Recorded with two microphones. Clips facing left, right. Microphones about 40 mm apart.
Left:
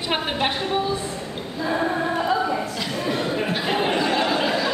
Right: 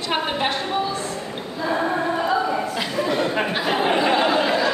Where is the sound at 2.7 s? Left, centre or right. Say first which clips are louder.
Right 3 dB; centre.